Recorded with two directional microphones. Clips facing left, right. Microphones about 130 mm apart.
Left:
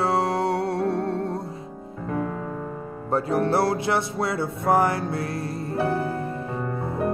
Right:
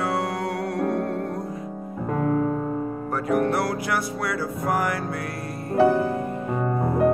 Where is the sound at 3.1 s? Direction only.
30° left (ahead or behind).